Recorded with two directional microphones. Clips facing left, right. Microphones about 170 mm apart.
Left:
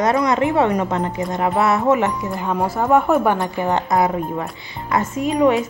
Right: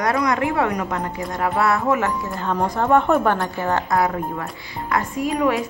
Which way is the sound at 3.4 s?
15° left (ahead or behind).